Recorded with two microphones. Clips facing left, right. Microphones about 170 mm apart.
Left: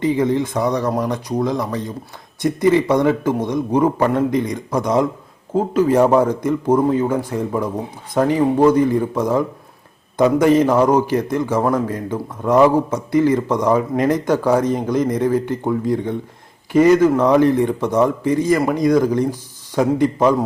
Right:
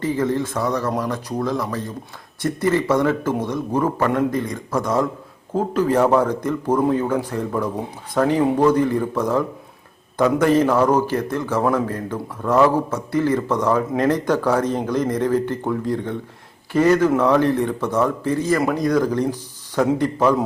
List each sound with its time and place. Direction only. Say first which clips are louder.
0.0 s a man's voice: left 4 dB; 15° left (ahead or behind)